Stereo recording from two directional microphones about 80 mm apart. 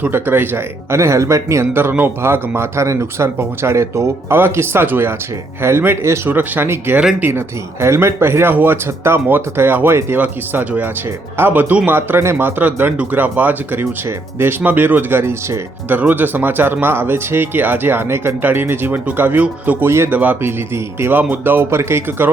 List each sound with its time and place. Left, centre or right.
0.0 s speech: right
16.0 s speech: right